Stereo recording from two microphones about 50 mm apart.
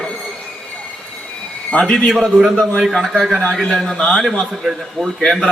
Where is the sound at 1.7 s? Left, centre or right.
Left.